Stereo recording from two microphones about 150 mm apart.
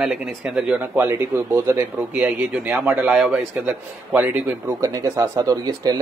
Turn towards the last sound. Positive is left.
turn(degrees=-25)  # may be behind; listen again after turning